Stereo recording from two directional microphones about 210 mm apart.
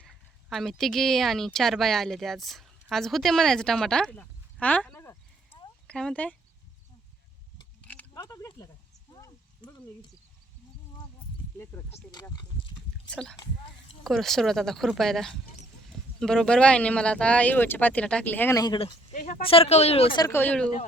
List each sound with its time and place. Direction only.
0.0 s speech: centre (ahead or behind)
4.6 s a sound: 5° left (ahead or behind)
7.8 s a sound: 10° left (ahead or behind)
11.6 s speech: 10° left (ahead or behind)
13.1 s speech: 5° left (ahead or behind); by 18.9 s 20° left (ahead or behind)
19.1 s speech: 35° left (ahead or behind); by 20.7 s 10° left (ahead or behind)